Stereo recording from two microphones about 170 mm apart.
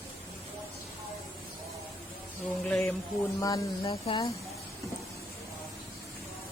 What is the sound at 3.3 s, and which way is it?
Speech, 20° left (ahead or behind).